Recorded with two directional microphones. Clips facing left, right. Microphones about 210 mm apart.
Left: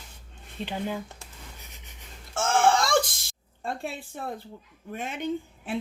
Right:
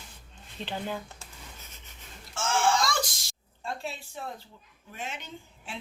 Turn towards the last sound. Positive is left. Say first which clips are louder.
# left 11 dB
turn(degrees=55)  # may be behind; listen again after turning